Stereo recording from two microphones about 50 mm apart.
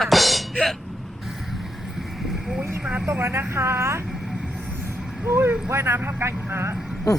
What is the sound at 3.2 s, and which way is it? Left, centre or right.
Speech, right.